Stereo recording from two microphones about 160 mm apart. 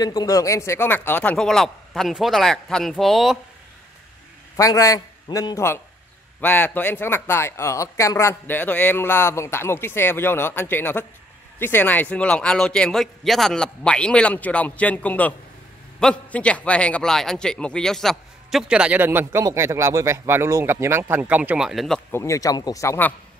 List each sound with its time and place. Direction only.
0.0 s a man's voice: 25° left (ahead or behind); by 3.3 s centre (ahead or behind)
4.6 s a man's voice: 20° left (ahead or behind); by 22.0 s centre (ahead or behind)
22.1 s a man's voice: 20° left (ahead or behind)